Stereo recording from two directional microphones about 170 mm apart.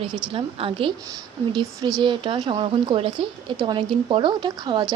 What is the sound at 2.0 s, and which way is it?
A woman's voice, 30° right (ahead or behind).